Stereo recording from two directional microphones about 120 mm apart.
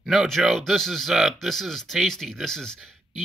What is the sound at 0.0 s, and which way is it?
Speech, centre (ahead or behind).